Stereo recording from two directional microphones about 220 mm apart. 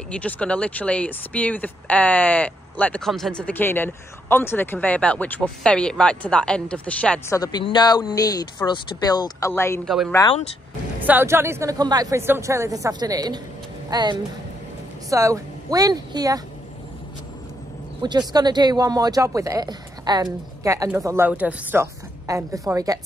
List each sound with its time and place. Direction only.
0.1 s speech: 5° left (ahead or behind)
7.3 s speech: 15° left (ahead or behind)
9.8 s speech: centre (ahead or behind); by 16.4 s 15° right (ahead or behind)
18.0 s speech: 20° right (ahead or behind)